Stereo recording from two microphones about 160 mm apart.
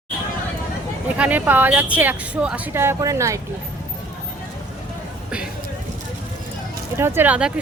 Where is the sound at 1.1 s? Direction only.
10° right (ahead or behind).